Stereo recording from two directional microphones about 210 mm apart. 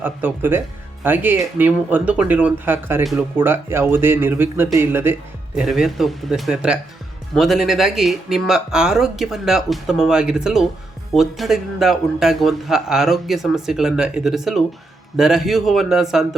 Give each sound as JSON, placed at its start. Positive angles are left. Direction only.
{"t": 0.0, "sound": "a man's voice", "side_deg": -10}